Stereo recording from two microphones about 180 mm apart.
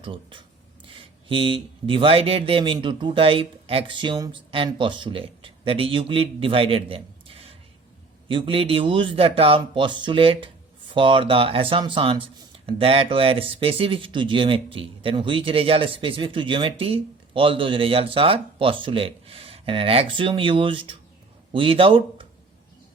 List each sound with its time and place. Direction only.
0.0 s speech: 30° right (ahead or behind)